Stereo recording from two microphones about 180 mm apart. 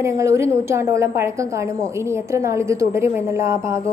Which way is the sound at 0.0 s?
15° right (ahead or behind).